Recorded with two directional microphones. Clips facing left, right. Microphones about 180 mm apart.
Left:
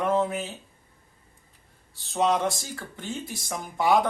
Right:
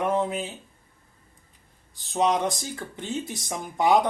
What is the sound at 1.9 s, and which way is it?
Speech, 15° right (ahead or behind).